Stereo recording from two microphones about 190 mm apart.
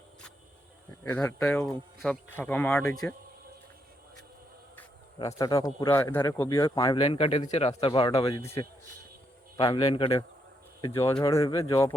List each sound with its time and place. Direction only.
1.1 s speech: 5° left (ahead or behind)
4.8 s speech: 20° left (ahead or behind)
8.4 s speech: 15° left (ahead or behind)
9.6 s speech: 30° left (ahead or behind)
10.8 s speech: 15° left (ahead or behind)